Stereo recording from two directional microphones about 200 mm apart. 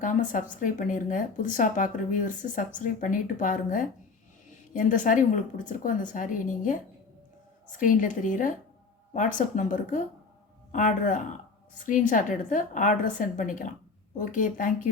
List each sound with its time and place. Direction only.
0.0 s a sound: 40° left (ahead or behind)
0.6 s speech: 40° left (ahead or behind)
7.8 s speech: 40° left (ahead or behind)